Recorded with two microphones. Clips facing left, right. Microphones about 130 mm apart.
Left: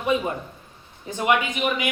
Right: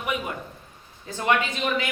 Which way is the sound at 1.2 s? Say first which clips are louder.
Left 2 dB; 15° left (ahead or behind).